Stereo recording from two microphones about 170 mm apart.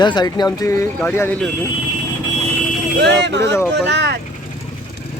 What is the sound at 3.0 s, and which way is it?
Speech, 90° right.